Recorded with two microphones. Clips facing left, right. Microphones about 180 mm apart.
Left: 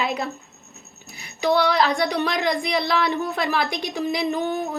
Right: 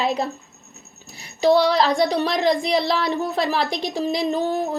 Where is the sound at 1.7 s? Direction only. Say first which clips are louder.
Right 2 dB; 30° right (ahead or behind).